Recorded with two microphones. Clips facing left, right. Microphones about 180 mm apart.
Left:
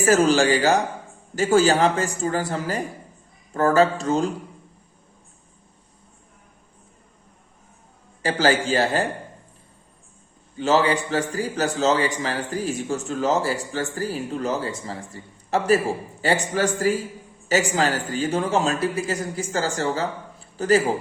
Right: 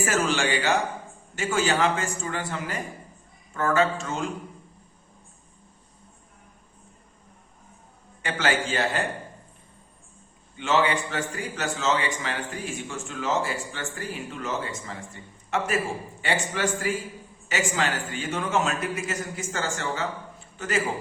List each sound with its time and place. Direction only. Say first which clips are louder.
0.0 s a man's voice: left 8 dB; 35° left (ahead or behind)
8.2 s a man's voice: left 6 dB; 35° left (ahead or behind)
10.6 s a man's voice: left 4 dB; 35° left (ahead or behind)